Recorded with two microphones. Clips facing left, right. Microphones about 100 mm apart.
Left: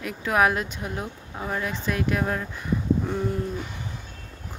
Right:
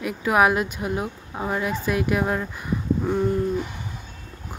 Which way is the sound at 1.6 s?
10° right (ahead or behind).